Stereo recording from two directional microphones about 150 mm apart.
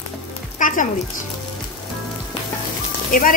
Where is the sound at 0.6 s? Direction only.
60° left (ahead or behind).